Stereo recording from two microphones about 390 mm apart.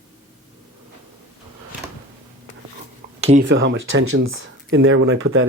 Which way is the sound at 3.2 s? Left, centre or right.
Centre.